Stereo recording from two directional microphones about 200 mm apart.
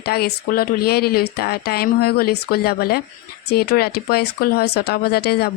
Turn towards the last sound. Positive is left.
turn(degrees=55)  # may be behind; listen again after turning